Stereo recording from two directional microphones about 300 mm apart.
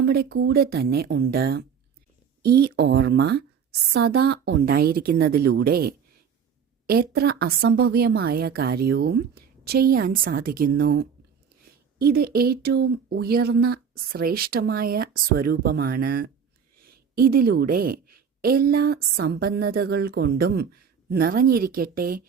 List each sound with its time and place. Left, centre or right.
0.0 s a woman's voice: right